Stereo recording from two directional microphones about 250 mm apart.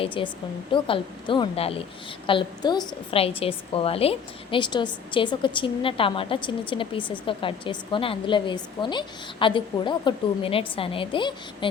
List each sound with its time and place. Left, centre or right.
0.0 s a woman's voice: left